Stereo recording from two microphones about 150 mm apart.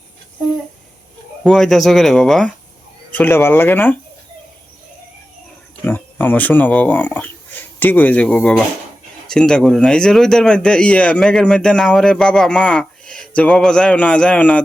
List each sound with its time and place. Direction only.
1.5 s speech: centre (ahead or behind)
5.8 s speech: 15° left (ahead or behind)